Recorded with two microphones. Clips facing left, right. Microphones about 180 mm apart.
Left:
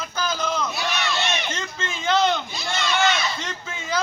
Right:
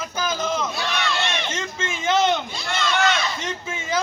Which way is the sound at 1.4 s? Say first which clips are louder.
Right 2 dB; 20° right (ahead or behind).